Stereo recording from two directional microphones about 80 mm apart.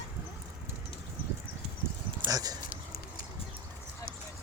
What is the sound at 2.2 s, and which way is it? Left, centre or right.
Speech, right.